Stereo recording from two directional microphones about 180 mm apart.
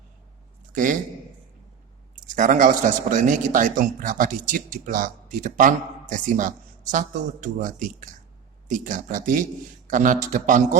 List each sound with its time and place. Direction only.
0.7 s a man's voice: 45° right (ahead or behind)
2.2 s a man's voice: 45° right (ahead or behind)